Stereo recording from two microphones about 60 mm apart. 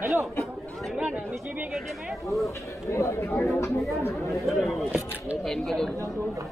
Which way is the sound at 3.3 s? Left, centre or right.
Left.